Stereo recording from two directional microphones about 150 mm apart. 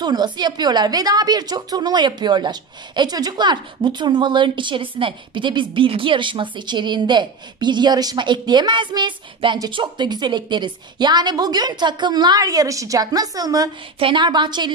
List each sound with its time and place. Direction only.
0.0 s a woman's voice: 30° right (ahead or behind)
13.9 s a woman's voice: 35° right (ahead or behind)